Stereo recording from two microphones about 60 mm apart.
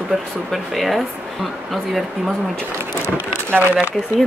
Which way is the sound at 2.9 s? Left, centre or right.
Right.